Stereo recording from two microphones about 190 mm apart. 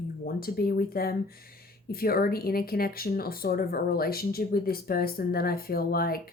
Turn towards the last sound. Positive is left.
turn(degrees=50)  # may be behind; listen again after turning